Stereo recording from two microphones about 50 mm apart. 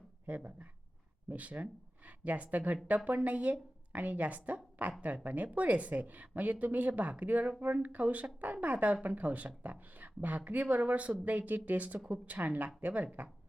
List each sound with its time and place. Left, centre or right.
0.3 s a woman's voice: right